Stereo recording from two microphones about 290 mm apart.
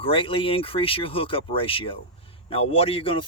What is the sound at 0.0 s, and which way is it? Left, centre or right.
Speech, centre.